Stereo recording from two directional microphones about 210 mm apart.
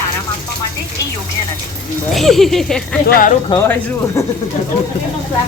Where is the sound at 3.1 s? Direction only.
45° left (ahead or behind).